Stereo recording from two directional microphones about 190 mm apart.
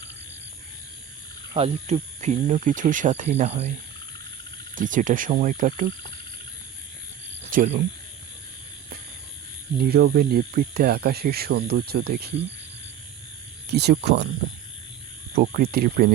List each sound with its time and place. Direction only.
1.5 s speech: 35° right (ahead or behind)
4.7 s speech: 45° right (ahead or behind)
7.5 s speech: 45° right (ahead or behind)
9.9 s speech: 50° right (ahead or behind)
13.7 s speech: 60° right (ahead or behind)
15.4 s speech: 50° right (ahead or behind)